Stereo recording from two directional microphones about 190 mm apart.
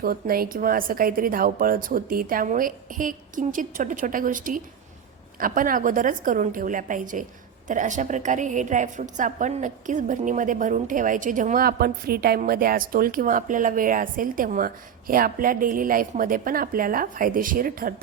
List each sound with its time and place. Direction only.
0.0 s a woman's voice: 50° right (ahead or behind)